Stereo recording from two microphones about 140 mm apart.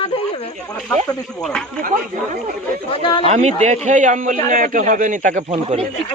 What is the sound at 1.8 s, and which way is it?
Speech, 65° right (ahead or behind).